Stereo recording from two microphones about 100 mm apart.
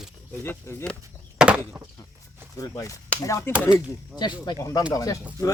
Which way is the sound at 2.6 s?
35° left (ahead or behind).